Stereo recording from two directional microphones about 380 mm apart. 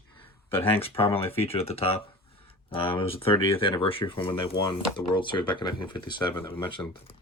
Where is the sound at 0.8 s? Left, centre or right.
Centre.